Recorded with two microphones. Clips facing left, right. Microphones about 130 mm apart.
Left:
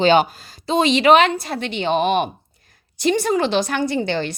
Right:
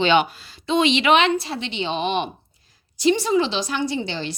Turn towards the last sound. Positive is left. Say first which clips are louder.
# left 4 dB
turn(degrees=55)  # may be behind; listen again after turning